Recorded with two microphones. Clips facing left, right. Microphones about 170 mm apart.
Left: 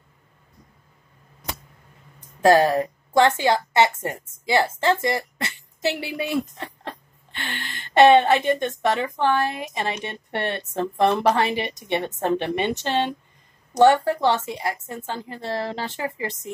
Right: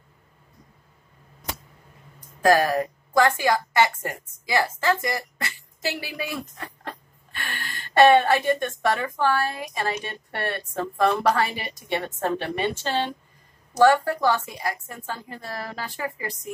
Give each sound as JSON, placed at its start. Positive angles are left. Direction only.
{"t": 2.4, "sound": "a woman's voice", "side_deg": 25}